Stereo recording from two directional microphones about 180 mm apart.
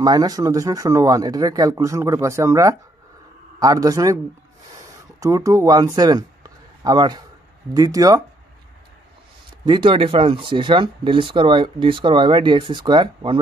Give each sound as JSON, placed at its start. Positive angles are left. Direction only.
{"t": 0.0, "sound": "speech", "side_deg": -20}
{"t": 5.2, "sound": "speech", "side_deg": -20}
{"t": 5.9, "sound": "a sound", "side_deg": -20}
{"t": 7.7, "sound": "speech", "side_deg": -20}
{"t": 9.7, "sound": "speech", "side_deg": -30}